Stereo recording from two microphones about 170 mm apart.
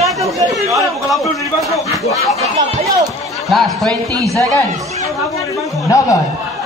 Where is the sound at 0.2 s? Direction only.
20° right (ahead or behind).